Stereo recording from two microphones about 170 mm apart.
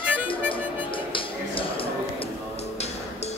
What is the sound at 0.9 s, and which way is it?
Music, 30° left (ahead or behind).